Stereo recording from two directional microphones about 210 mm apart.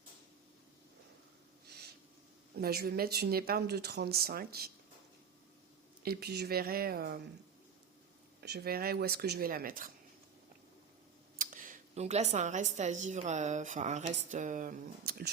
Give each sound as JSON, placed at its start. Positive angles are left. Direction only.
{"t": 2.6, "sound": "speech", "side_deg": -50}
{"t": 6.0, "sound": "speech", "side_deg": -45}
{"t": 8.4, "sound": "speech", "side_deg": -50}
{"t": 11.3, "sound": "a woman's voice", "side_deg": -40}